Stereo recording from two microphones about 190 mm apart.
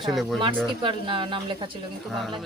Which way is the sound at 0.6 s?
25° right (ahead or behind).